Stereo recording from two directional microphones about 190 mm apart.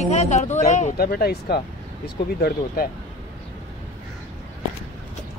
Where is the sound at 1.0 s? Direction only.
55° left (ahead or behind).